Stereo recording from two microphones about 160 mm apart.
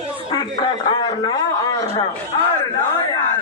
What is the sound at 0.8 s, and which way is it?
A man's voice, 25° left (ahead or behind).